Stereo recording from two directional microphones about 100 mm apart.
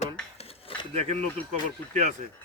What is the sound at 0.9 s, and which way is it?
Speech, 90° right.